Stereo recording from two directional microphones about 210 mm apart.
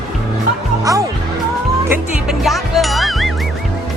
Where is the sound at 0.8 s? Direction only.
15° right (ahead or behind).